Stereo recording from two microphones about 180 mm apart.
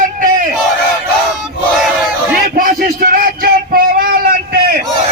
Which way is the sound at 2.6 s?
50° right (ahead or behind).